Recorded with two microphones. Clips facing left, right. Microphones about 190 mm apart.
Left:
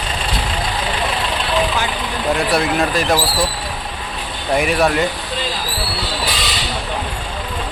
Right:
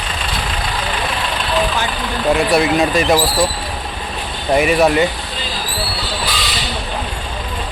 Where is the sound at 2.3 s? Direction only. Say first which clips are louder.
Right 4 dB; centre (ahead or behind).